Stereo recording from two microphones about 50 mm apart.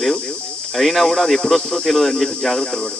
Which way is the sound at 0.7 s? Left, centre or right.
Centre.